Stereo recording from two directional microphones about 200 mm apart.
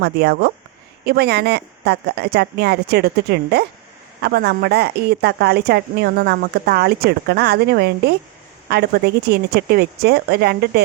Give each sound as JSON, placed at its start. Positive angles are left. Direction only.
{"t": 0.0, "sound": "a woman's voice", "side_deg": -55}